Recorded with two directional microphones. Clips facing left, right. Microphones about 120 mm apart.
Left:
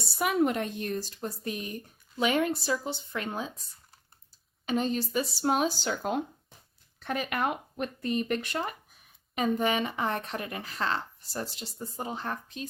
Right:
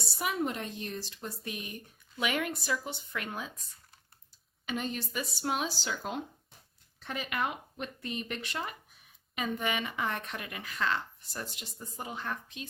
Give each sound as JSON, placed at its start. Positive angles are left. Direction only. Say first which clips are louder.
{"t": 0.2, "sound": "speech", "louder": "left 7 dB", "side_deg": 65}
{"t": 4.6, "sound": "speech", "louder": "left 7 dB", "side_deg": 35}
{"t": 9.3, "sound": "speech", "louder": "left 6 dB", "side_deg": 35}